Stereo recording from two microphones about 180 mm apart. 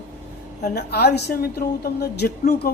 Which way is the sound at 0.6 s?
60° left (ahead or behind).